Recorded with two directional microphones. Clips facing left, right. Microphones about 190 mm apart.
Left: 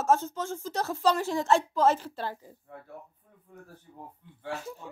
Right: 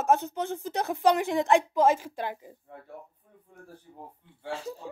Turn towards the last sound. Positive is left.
turn(degrees=-30)  # may be behind; listen again after turning